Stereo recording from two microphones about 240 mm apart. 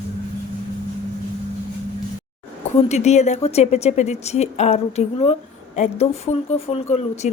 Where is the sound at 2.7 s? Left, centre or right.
Left.